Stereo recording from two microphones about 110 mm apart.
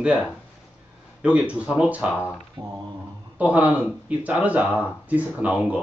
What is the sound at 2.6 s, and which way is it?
Mantra, 35° right (ahead or behind).